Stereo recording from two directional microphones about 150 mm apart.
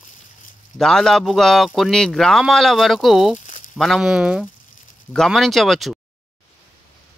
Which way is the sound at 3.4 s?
60° left (ahead or behind).